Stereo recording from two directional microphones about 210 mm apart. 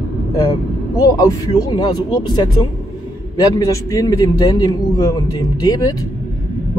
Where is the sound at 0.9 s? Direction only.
15° left (ahead or behind).